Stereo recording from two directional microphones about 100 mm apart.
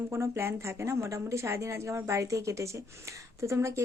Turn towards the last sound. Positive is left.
turn(degrees=-30)  # may be behind; listen again after turning